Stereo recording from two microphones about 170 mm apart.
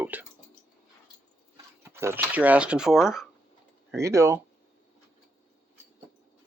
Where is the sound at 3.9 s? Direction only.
15° right (ahead or behind).